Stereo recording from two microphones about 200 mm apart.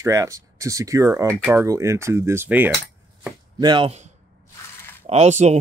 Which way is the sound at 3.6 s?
25° right (ahead or behind).